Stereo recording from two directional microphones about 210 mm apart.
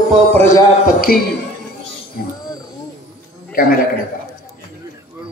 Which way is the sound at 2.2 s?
45° left (ahead or behind).